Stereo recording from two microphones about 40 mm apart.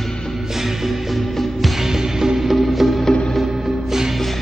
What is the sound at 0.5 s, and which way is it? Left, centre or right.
Music, centre.